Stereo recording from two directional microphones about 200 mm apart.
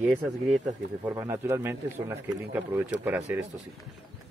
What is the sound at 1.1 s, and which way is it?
Speech, 15° right (ahead or behind).